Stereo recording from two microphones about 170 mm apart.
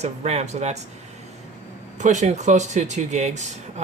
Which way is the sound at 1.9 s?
45° right (ahead or behind).